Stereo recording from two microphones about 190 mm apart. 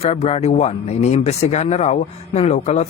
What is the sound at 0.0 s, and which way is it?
Speech, 35° left (ahead or behind).